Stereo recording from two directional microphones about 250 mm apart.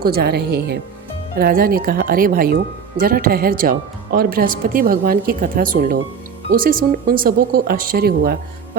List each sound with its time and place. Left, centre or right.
0.0 s speech: right